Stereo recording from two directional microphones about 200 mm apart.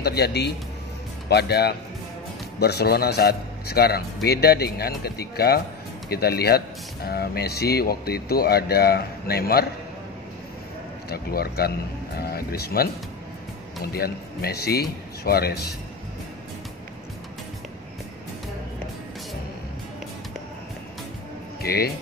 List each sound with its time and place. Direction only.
0.0 s a man's voice: 55° left (ahead or behind)
11.1 s a man's voice: 50° left (ahead or behind)
13.9 s a man's voice: 50° left (ahead or behind)
21.5 s speech: 50° left (ahead or behind)